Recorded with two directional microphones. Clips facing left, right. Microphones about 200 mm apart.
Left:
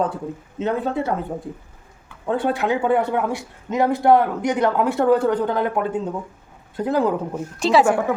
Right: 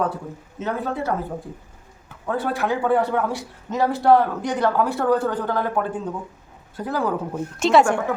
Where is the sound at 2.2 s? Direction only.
25° left (ahead or behind).